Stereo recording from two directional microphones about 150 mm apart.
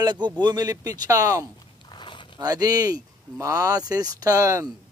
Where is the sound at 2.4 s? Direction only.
25° right (ahead or behind).